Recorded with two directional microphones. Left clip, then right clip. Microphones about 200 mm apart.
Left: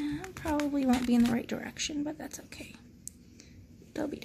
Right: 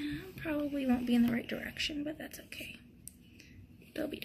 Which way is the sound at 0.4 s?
45° left (ahead or behind).